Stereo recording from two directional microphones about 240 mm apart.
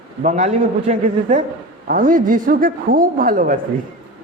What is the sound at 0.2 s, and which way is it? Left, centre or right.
A woman's voice, right.